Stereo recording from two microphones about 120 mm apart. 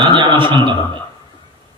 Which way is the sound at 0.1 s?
45° right (ahead or behind).